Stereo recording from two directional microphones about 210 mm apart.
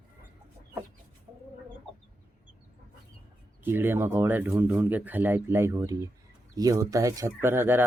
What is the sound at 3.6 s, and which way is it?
Speech, 10° right (ahead or behind).